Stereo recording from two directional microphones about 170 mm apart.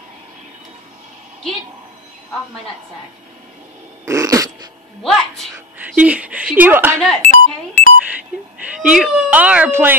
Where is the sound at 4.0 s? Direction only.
20° right (ahead or behind).